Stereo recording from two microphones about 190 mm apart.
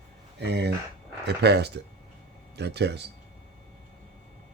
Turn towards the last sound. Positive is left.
turn(degrees=-60)  # may be behind; listen again after turning